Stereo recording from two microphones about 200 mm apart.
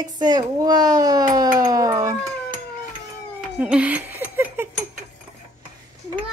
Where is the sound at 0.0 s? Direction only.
20° right (ahead or behind).